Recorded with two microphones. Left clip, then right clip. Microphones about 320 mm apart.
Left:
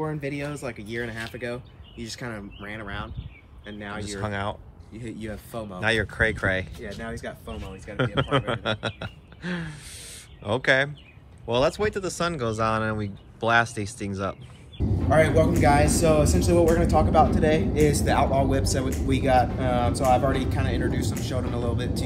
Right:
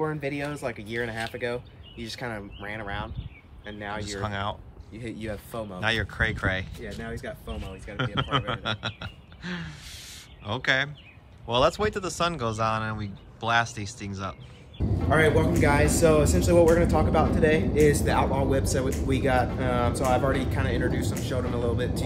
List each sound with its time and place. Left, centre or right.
0.0 s speech: right
4.0 s speech: centre
4.9 s speech: right
5.3 s speech: centre